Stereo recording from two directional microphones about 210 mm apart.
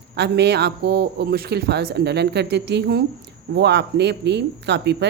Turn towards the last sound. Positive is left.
turn(degrees=-55)  # may be behind; listen again after turning